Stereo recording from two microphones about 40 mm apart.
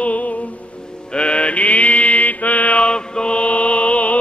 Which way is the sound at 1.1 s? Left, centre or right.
Left.